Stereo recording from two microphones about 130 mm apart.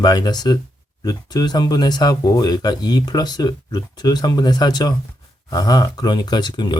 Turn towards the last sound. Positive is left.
turn(degrees=35)  # may be behind; listen again after turning